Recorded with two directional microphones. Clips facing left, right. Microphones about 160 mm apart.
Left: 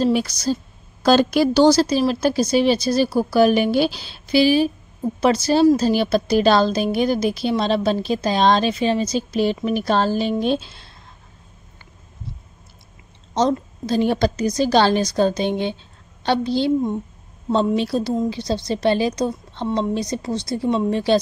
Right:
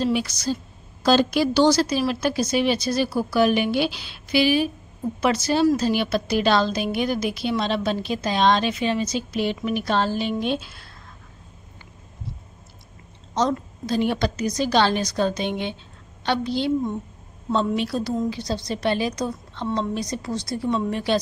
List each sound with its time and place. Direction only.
0.0 s a woman's voice: 40° left (ahead or behind)
13.3 s a woman's voice: 30° left (ahead or behind)